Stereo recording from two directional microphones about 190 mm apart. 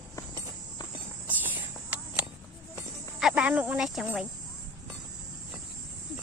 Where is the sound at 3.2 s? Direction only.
5° right (ahead or behind).